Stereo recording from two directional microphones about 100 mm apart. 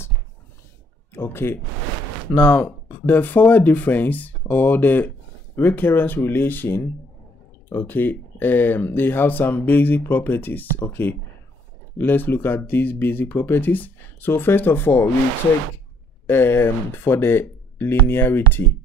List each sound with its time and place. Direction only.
1.1 s speech: 25° left (ahead or behind)
16.3 s speech: 25° left (ahead or behind)